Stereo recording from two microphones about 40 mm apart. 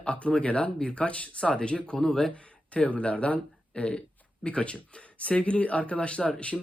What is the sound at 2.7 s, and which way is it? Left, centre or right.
Speech, left.